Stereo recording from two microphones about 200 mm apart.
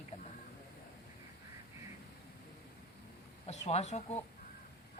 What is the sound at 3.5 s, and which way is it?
Speech, 35° left (ahead or behind).